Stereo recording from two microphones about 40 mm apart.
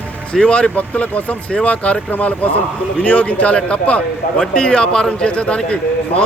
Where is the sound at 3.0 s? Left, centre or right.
Left.